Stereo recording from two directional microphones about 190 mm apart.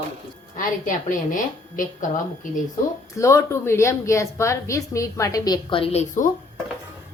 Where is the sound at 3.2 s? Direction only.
15° left (ahead or behind); by 6.3 s 40° left (ahead or behind).